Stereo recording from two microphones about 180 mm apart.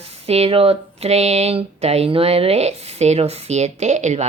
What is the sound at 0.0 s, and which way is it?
Speech, 35° right (ahead or behind).